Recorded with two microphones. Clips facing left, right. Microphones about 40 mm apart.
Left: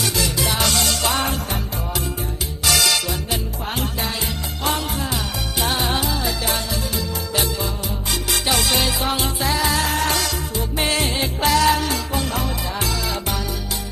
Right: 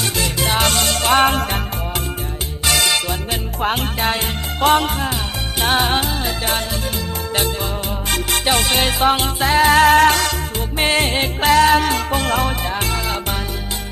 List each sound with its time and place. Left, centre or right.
0.0 s music: right
2.6 s music: right
3.6 s music: right
12.7 s music: right